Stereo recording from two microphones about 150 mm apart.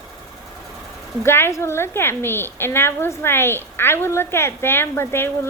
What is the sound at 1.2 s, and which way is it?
A woman's voice, 15° left (ahead or behind).